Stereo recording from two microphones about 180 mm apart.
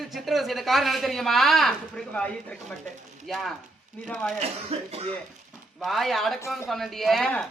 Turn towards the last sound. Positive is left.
turn(degrees=5)  # may be behind; listen again after turning